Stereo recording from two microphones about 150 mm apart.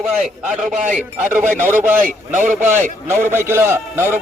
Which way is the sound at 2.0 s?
60° right (ahead or behind).